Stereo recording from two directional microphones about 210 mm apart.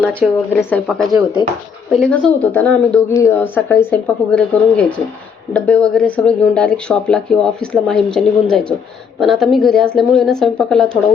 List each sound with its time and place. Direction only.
0.5 s speech: 5° left (ahead or behind)